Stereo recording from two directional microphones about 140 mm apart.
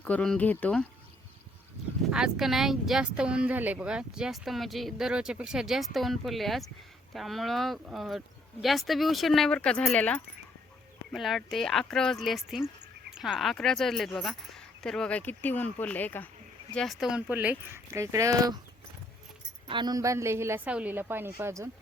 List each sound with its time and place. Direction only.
0.0 s speech: 10° left (ahead or behind)
2.0 s speech: 5° right (ahead or behind)
11.1 s speech: centre (ahead or behind)
16.7 s speech: centre (ahead or behind); by 18.6 s 25° right (ahead or behind)
19.6 s speech: 35° right (ahead or behind)